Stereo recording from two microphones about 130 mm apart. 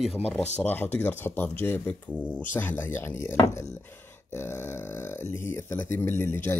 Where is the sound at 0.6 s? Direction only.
15° left (ahead or behind).